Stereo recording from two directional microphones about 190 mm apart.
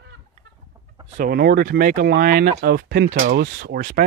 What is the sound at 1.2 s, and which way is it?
Speech, 55° right (ahead or behind).